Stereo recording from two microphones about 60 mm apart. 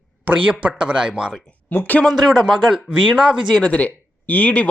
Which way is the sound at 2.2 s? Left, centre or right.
Centre.